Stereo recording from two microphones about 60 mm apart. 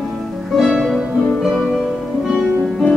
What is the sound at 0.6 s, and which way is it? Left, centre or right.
Music, centre.